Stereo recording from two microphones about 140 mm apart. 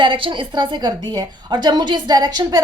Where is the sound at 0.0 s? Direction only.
35° right (ahead or behind).